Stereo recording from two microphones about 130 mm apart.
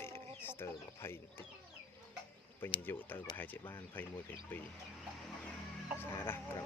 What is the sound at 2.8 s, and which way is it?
Speech, 15° left (ahead or behind).